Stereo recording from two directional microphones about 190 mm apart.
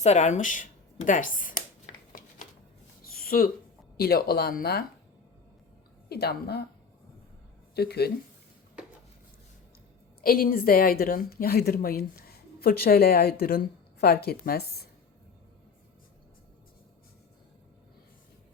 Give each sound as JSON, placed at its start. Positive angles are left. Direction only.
{"t": 0.0, "sound": "speech", "side_deg": 35}
{"t": 3.0, "sound": "a sound", "side_deg": 50}
{"t": 3.9, "sound": "a woman's voice", "side_deg": 55}
{"t": 6.1, "sound": "a woman's voice", "side_deg": 55}
{"t": 7.8, "sound": "a woman's voice", "side_deg": 55}
{"t": 10.2, "sound": "a woman's voice", "side_deg": 50}